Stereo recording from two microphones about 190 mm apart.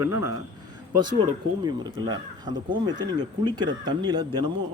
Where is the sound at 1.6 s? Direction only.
20° right (ahead or behind).